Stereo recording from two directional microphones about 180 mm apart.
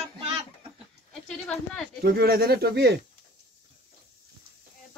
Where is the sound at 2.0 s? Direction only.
60° right (ahead or behind).